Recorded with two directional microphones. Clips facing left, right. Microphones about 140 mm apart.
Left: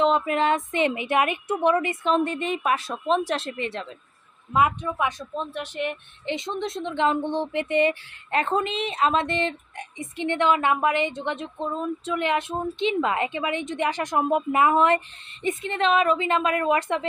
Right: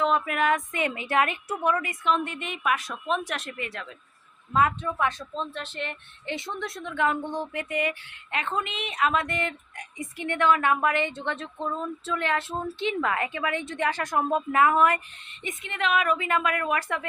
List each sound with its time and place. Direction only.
0.0 s a woman's voice: 25° left (ahead or behind)
4.5 s a woman's voice: 15° left (ahead or behind)